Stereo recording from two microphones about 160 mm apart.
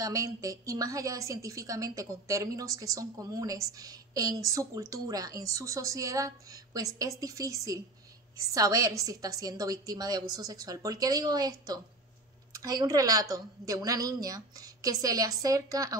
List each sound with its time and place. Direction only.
0.0 s a woman's voice: 20° right (ahead or behind)